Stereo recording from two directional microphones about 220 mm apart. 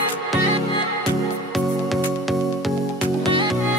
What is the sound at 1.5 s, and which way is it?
Music, centre (ahead or behind).